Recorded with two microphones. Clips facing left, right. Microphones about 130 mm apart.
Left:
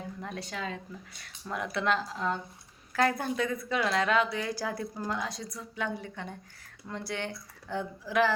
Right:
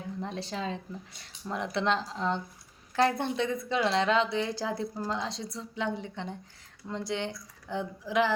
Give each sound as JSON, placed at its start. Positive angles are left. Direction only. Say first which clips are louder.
{"t": 0.2, "sound": "a woman's voice", "louder": "right 4 dB", "side_deg": -30}